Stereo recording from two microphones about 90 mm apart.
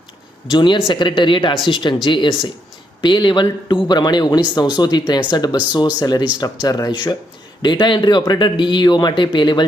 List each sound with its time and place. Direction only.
0.5 s speech: 55° left (ahead or behind)